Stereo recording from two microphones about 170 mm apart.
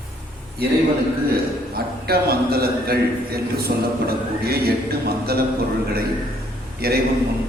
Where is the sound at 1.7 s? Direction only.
65° right (ahead or behind).